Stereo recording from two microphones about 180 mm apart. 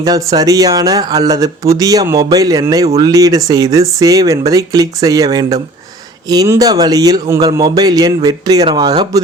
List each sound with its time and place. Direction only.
0.3 s speech: 20° right (ahead or behind)